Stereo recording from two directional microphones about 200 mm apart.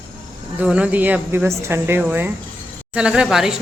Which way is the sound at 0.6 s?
5° right (ahead or behind).